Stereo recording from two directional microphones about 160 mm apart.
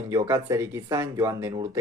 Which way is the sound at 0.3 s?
20° right (ahead or behind).